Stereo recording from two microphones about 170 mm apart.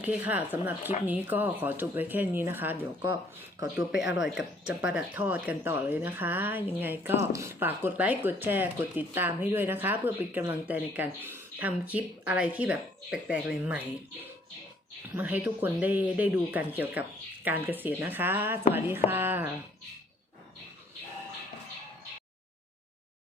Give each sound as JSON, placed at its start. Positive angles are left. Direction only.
{"t": 0.0, "sound": "speech", "side_deg": -10}
{"t": 15.1, "sound": "speech", "side_deg": -10}